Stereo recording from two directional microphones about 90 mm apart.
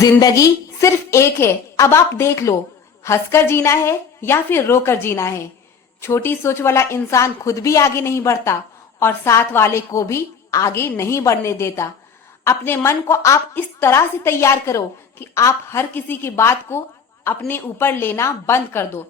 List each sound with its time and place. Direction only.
0.0 s a woman's voice: 40° left (ahead or behind)